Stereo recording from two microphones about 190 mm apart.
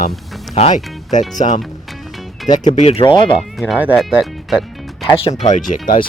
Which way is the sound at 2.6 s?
35° left (ahead or behind).